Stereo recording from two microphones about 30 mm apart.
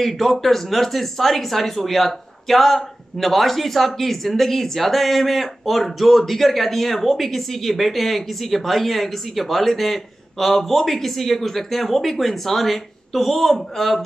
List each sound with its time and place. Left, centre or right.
0.0 s speech: centre